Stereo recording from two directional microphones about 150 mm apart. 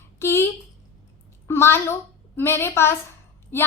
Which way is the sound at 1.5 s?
15° left (ahead or behind).